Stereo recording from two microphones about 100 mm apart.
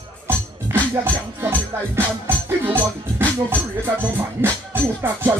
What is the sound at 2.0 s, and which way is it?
Speech, 20° right (ahead or behind).